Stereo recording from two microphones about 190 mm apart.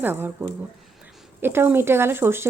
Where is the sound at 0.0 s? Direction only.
10° right (ahead or behind).